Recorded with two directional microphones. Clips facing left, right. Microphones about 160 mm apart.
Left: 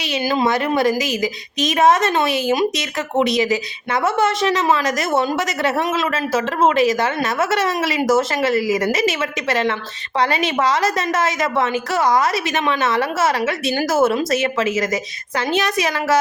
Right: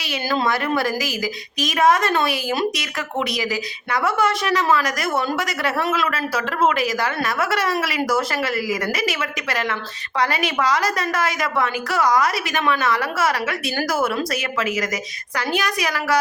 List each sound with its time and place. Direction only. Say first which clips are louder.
0.0 s a woman's voice: left 4 dB; 20° left (ahead or behind)